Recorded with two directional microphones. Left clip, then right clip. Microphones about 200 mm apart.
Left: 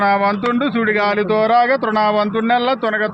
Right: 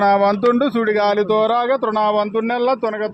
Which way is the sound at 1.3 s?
35° right (ahead or behind).